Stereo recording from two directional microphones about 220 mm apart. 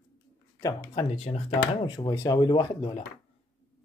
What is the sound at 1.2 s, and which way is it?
Speech, 25° left (ahead or behind).